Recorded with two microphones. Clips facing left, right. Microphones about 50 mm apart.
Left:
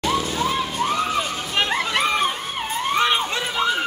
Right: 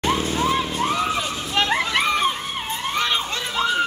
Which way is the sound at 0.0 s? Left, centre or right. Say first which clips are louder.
Right 1 dB; right.